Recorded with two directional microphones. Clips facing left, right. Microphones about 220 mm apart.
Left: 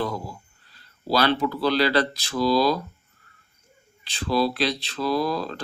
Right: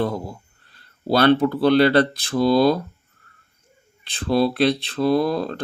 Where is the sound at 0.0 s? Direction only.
55° right (ahead or behind).